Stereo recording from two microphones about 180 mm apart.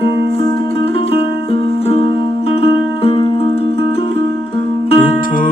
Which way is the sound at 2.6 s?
30° left (ahead or behind).